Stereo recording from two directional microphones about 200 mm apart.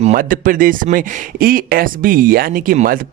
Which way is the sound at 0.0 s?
40° right (ahead or behind).